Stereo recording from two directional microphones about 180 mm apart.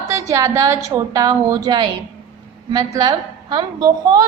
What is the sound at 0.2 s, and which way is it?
A woman's voice, 15° right (ahead or behind).